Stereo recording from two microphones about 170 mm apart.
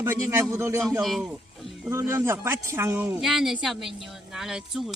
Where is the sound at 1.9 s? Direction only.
15° right (ahead or behind).